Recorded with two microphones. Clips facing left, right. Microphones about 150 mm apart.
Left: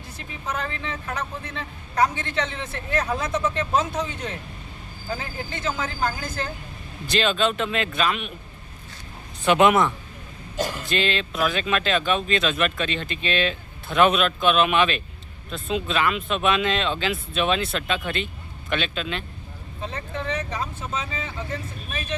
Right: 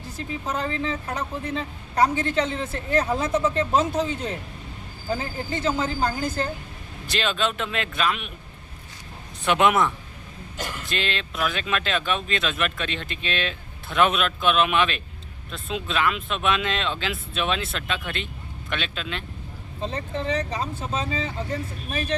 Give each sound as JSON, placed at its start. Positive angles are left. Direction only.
{"t": 0.5, "sound": "a man's voice", "side_deg": -35}
{"t": 7.1, "sound": "speech", "side_deg": 0}
{"t": 9.4, "sound": "speech", "side_deg": 0}
{"t": 19.8, "sound": "a man's voice", "side_deg": -35}